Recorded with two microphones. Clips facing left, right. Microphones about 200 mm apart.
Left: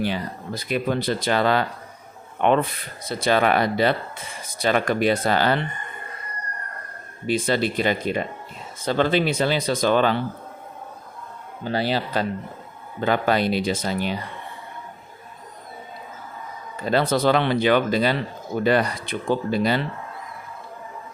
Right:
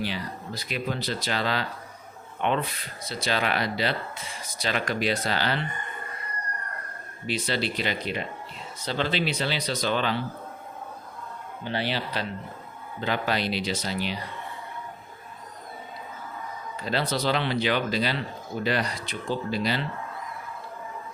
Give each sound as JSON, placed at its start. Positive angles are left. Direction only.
{"t": 0.0, "sound": "speech", "side_deg": 50}
{"t": 7.3, "sound": "speech", "side_deg": 50}
{"t": 11.6, "sound": "speech", "side_deg": 40}
{"t": 16.8, "sound": "speech", "side_deg": 50}